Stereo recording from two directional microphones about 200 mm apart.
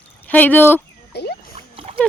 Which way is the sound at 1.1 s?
55° left (ahead or behind).